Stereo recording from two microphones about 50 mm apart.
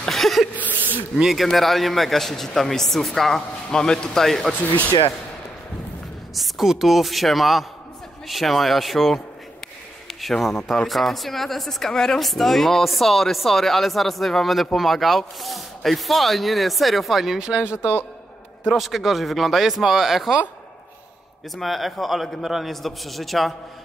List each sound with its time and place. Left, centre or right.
0.1 s a sound: centre
0.6 s a sound: left
1.1 s speech: centre
4.6 s speech: left
6.3 s speech: centre
18.7 s speech: centre
21.5 s speech: centre